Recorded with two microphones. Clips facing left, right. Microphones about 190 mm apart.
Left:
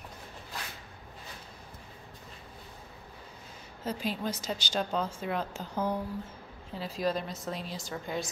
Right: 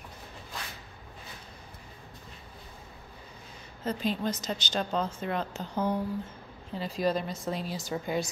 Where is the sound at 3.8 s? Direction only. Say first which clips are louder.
Right 3 dB; 10° left (ahead or behind).